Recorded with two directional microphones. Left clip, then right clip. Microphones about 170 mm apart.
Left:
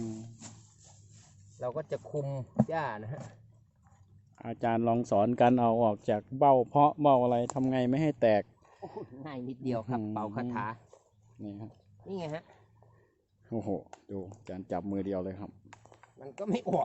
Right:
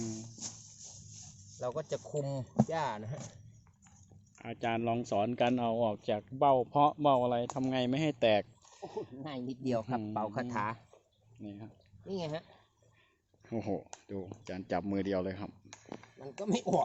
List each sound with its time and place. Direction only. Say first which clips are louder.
1.5 s speech: left 1 dB; 15° left (ahead or behind)
4.4 s speech: left 4 dB; 30° left (ahead or behind)
9.2 s speech: left 3 dB; 10° right (ahead or behind)
10.2 s a man's voice: even; 30° right (ahead or behind)
11.4 s speech: left 3 dB; 30° left (ahead or behind)
12.0 s speech: even; 10° right (ahead or behind)
13.5 s speech: left 2 dB; 25° left (ahead or behind)
13.9 s speech: left 1 dB; 15° left (ahead or behind)
16.2 s speech: left 1 dB; 5° right (ahead or behind)